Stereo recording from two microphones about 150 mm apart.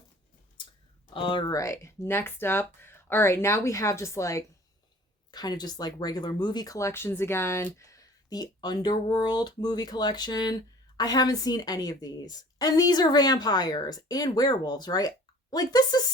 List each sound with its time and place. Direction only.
1.1 s speech: 35° left (ahead or behind)
1.5 s speech: 20° left (ahead or behind)